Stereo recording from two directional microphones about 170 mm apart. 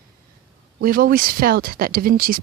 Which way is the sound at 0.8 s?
60° right (ahead or behind).